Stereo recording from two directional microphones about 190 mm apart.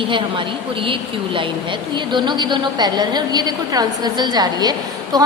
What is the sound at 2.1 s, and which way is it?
A woman's voice, 25° right (ahead or behind).